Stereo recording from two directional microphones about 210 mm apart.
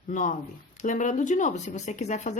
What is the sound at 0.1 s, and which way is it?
Speech, 35° left (ahead or behind).